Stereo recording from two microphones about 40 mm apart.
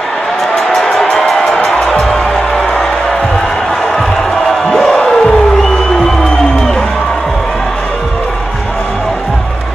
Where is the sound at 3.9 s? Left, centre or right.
Centre.